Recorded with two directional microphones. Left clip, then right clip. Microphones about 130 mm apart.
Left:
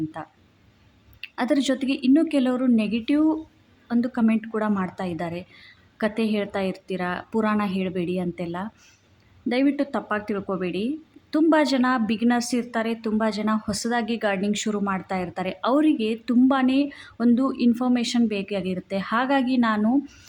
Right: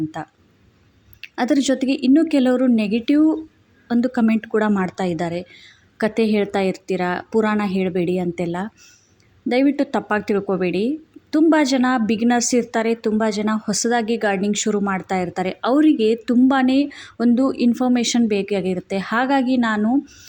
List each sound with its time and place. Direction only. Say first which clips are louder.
1.2 s speech: right 4 dB; 25° right (ahead or behind)
19.9 s speech: right 3 dB; 5° right (ahead or behind)